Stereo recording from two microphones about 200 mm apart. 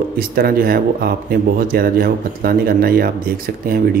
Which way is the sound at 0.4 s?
50° right (ahead or behind).